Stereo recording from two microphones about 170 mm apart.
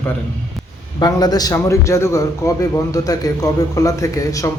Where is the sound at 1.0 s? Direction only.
20° left (ahead or behind).